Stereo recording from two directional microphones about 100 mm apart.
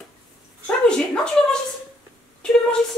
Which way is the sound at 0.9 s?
10° left (ahead or behind).